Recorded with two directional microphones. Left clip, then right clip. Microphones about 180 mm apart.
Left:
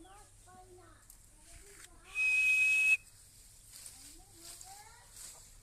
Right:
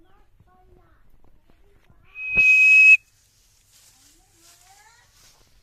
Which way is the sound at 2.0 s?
40° left (ahead or behind).